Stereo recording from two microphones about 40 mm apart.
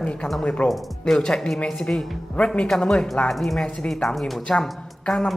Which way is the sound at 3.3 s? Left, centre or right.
Centre.